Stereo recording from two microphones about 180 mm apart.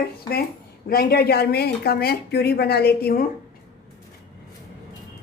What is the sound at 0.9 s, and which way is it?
Speech, 60° left (ahead or behind).